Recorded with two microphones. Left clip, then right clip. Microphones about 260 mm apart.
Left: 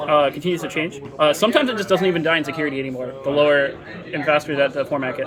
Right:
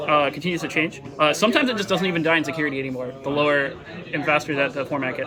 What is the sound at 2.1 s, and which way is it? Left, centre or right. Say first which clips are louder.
Speech: left 2 dB; centre.